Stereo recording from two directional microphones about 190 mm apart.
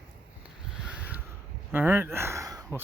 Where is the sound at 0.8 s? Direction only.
5° right (ahead or behind).